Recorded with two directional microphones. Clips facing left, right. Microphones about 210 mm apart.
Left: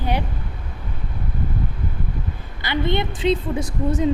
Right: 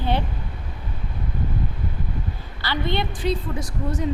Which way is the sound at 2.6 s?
20° left (ahead or behind).